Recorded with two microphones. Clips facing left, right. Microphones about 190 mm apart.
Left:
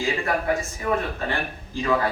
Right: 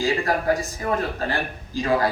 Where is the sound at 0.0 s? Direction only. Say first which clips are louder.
Right 2 dB; 35° right (ahead or behind).